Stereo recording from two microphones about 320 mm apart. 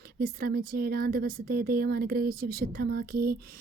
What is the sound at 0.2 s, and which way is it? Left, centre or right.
Speech, right.